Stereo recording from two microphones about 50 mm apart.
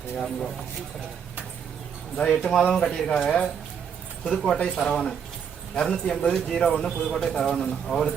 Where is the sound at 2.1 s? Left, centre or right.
Centre.